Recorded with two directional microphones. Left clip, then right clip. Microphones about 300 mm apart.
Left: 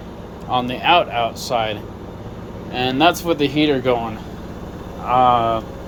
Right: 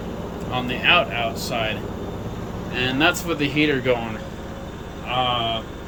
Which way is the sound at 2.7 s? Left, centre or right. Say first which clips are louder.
Left 4 dB; centre.